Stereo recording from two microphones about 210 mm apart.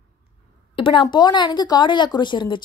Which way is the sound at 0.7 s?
25° left (ahead or behind).